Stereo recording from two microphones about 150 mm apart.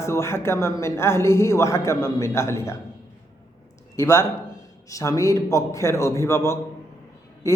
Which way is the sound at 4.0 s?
20° left (ahead or behind).